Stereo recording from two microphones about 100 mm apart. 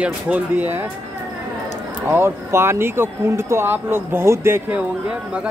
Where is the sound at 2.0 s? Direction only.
25° right (ahead or behind).